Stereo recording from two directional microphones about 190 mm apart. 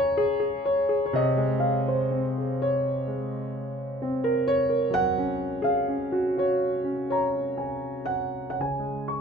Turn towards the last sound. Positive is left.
turn(degrees=0)  # may be behind; listen again after turning